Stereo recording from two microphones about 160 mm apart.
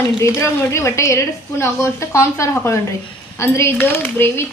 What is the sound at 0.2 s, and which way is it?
A woman's voice, 15° left (ahead or behind).